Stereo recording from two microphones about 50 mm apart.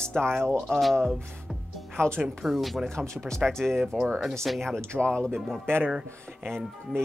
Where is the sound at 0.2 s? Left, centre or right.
Right.